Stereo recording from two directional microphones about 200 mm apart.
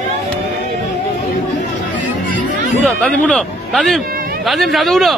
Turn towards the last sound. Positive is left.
turn(degrees=0)  # may be behind; listen again after turning